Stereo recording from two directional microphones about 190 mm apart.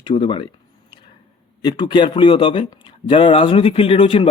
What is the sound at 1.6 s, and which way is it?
Speech, 20° left (ahead or behind).